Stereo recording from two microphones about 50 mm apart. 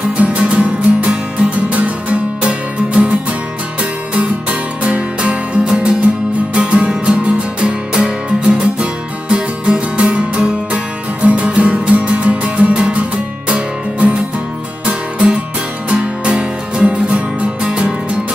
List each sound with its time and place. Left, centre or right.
0.2 s music: right